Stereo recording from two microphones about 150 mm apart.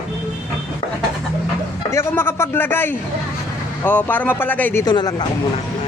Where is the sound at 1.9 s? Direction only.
15° left (ahead or behind).